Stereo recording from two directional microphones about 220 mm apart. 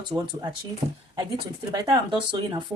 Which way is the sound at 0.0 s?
20° right (ahead or behind).